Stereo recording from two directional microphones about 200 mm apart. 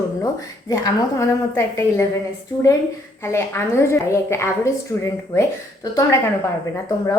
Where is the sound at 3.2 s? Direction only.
15° left (ahead or behind).